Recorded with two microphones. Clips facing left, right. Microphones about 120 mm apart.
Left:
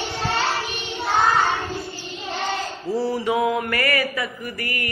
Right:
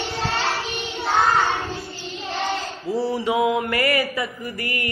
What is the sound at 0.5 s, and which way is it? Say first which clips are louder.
Child singing: even; centre (ahead or behind).